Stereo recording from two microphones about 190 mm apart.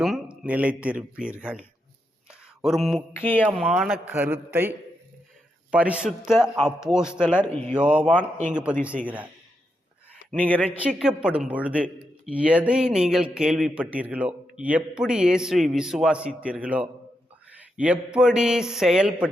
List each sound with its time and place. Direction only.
0.0 s speech: 5° right (ahead or behind)
3.1 s mantra: 10° left (ahead or behind)
3.6 s speech: 5° right (ahead or behind)
5.7 s speech: 5° right (ahead or behind)
10.4 s mantra: 10° left (ahead or behind)
10.8 s speech: 5° right (ahead or behind)